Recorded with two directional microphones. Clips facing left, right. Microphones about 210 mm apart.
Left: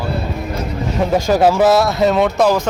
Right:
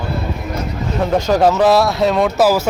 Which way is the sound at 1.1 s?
5° left (ahead or behind).